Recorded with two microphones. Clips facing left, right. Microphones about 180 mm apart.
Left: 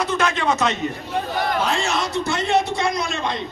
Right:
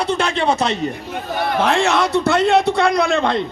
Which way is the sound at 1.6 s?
60° right (ahead or behind).